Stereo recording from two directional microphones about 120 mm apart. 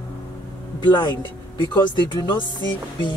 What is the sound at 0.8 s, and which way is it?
Speech, 40° left (ahead or behind).